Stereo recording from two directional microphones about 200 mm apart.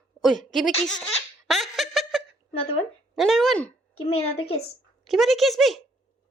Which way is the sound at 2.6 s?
30° left (ahead or behind).